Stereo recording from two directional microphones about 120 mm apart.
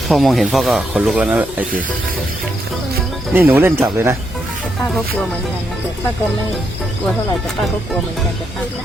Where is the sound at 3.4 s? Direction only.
15° right (ahead or behind).